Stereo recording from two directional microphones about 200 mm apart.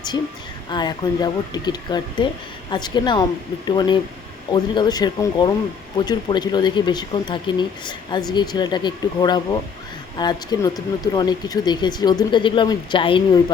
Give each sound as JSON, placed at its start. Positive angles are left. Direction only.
{"t": 0.7, "sound": "speech", "side_deg": 20}